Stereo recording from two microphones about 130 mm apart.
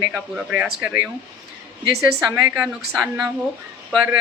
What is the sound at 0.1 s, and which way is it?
Speech, 10° right (ahead or behind).